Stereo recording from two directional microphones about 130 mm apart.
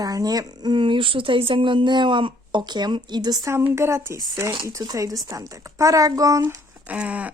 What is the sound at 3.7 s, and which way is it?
A woman's voice, 20° right (ahead or behind).